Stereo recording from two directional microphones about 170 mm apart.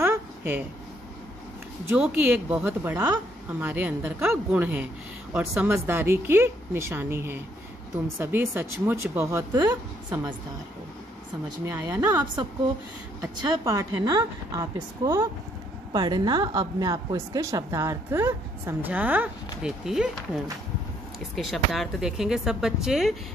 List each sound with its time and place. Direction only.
0.0 s a sound: 15° right (ahead or behind)
1.9 s a woman's voice: 10° right (ahead or behind)
11.6 s a woman's voice: 15° right (ahead or behind)
13.2 s a woman's voice: 20° right (ahead or behind)
21.4 s speech: centre (ahead or behind)